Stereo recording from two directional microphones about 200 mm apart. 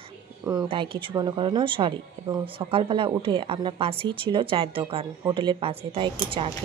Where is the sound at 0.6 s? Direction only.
25° right (ahead or behind).